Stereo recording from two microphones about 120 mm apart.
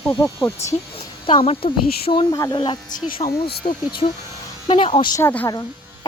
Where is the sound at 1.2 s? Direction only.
50° left (ahead or behind).